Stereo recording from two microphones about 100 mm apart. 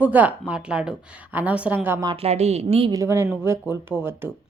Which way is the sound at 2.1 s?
90° right.